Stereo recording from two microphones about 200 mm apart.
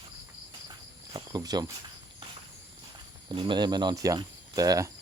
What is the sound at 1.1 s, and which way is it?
Cricket, 20° right (ahead or behind).